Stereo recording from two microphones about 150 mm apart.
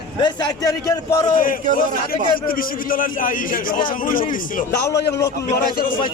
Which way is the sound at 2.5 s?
70° left (ahead or behind).